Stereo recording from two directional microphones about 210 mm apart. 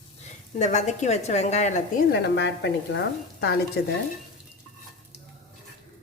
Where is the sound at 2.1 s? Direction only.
55° left (ahead or behind).